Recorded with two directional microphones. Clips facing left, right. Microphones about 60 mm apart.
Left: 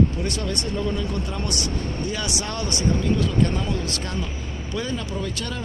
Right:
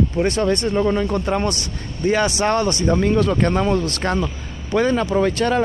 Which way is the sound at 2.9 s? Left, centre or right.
Right.